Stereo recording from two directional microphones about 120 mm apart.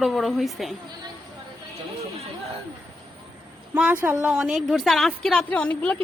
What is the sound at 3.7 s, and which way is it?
A woman's voice, 10° right (ahead or behind).